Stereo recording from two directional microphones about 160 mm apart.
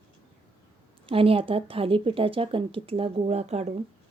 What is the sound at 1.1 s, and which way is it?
A woman's voice, 35° right (ahead or behind).